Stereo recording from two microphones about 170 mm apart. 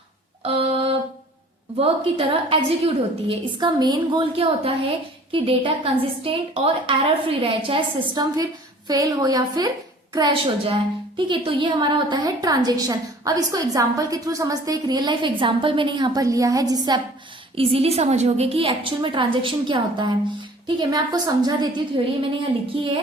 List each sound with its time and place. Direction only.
0.4 s a sound: 35° right (ahead or behind)
1.8 s a woman's voice: 35° right (ahead or behind)
17.5 s a woman's voice: 35° right (ahead or behind)